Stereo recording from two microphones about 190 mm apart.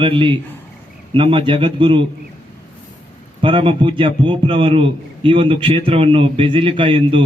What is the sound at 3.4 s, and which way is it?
A man's voice, 25° right (ahead or behind).